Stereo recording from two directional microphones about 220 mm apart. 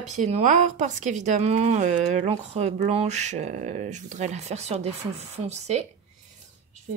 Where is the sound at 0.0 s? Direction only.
30° right (ahead or behind).